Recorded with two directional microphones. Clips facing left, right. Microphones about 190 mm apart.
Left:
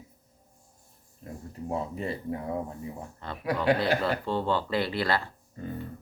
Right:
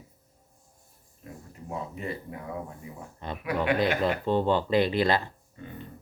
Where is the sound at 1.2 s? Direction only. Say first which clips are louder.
Left 5 dB; 35° left (ahead or behind).